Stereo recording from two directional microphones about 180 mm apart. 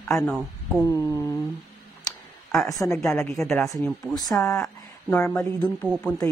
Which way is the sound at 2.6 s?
20° left (ahead or behind).